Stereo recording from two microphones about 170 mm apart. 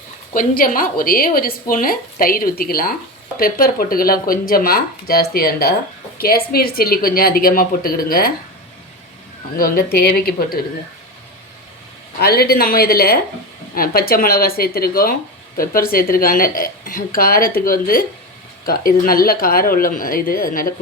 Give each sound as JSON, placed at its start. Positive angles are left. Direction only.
{"t": 0.3, "sound": "speech", "side_deg": 55}
{"t": 9.6, "sound": "speech", "side_deg": 60}
{"t": 12.2, "sound": "speech", "side_deg": 65}